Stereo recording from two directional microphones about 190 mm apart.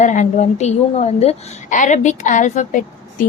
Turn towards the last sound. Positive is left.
turn(degrees=45)  # may be behind; listen again after turning